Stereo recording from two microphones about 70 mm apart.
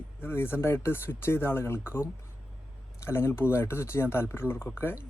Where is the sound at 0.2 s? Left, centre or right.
Left.